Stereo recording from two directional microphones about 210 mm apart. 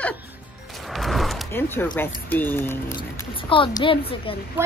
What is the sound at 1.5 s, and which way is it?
Speech, 10° left (ahead or behind).